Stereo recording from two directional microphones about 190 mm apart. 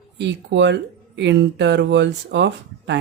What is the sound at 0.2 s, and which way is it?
Speech, 65° right (ahead or behind).